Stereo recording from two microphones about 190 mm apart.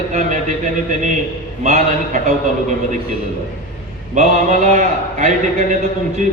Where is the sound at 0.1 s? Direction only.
40° right (ahead or behind).